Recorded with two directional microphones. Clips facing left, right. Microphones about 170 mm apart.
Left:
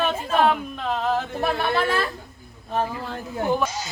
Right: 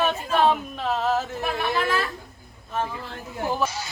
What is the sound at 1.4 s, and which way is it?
Speech, 35° left (ahead or behind).